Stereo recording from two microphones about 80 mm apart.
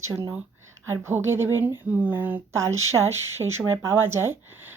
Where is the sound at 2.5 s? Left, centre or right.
Right.